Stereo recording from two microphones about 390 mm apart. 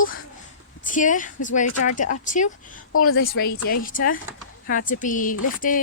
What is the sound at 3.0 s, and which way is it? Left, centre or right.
Speech, left.